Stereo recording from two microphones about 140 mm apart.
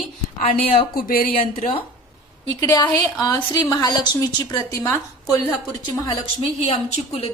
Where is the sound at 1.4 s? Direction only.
70° left (ahead or behind).